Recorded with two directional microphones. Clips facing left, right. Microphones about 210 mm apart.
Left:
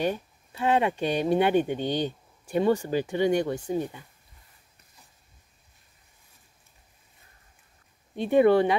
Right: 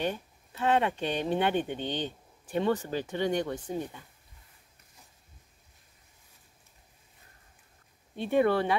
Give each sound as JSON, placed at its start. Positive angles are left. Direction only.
{"t": 0.0, "sound": "speech", "side_deg": 10}
{"t": 8.2, "sound": "speech", "side_deg": 15}